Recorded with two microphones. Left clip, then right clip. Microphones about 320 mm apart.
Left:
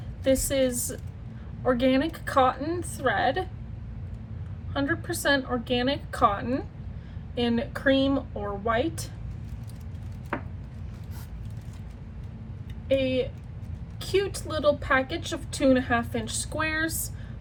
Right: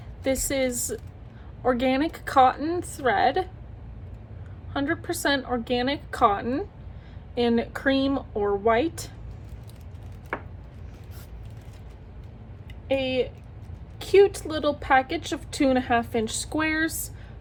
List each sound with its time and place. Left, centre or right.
0.3 s a woman's voice: centre
4.7 s a woman's voice: centre
12.9 s a woman's voice: centre